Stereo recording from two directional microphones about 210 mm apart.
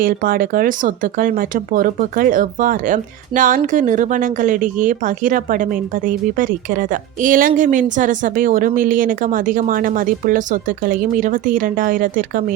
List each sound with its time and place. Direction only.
0.0 s speech: 45° right (ahead or behind)